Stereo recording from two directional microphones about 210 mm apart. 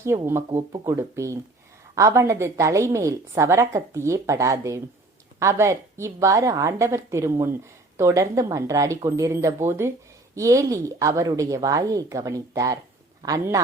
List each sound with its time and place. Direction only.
0.0 s a woman's voice: 10° right (ahead or behind)